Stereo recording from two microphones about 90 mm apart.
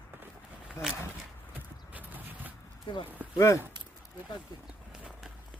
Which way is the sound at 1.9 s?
20° right (ahead or behind).